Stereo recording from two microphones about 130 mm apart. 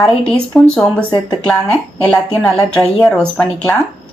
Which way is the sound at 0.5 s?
10° left (ahead or behind).